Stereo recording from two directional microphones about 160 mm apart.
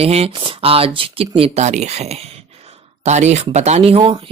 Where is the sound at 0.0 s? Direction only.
40° right (ahead or behind).